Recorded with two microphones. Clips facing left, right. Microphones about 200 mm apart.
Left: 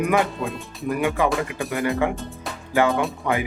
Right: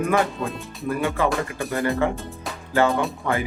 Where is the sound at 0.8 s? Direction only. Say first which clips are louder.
Left 1 dB; 15° left (ahead or behind).